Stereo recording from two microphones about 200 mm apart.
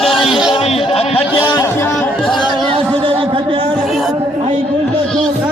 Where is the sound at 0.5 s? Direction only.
30° left (ahead or behind).